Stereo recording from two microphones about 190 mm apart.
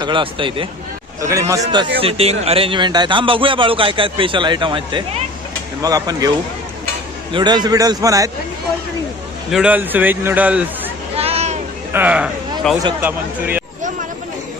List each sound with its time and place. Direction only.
0.0 s a man's voice: 25° right (ahead or behind)
1.2 s a man's voice: 15° right (ahead or behind)
2.0 s a man's voice: 30° right (ahead or behind)
7.3 s a man's voice: 20° right (ahead or behind)
9.5 s a man's voice: 5° right (ahead or behind)
11.2 s vehicle: 35° right (ahead or behind)
11.9 s a man's voice: 5° right (ahead or behind)